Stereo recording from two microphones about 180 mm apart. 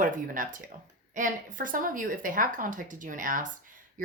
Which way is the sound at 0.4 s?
50° right (ahead or behind).